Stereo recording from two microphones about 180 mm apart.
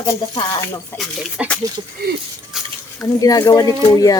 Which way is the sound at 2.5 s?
Centre (ahead or behind).